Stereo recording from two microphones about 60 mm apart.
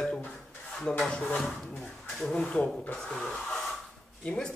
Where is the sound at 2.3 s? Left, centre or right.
Centre.